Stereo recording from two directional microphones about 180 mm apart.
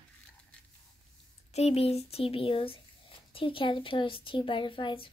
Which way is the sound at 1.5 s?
35° left (ahead or behind).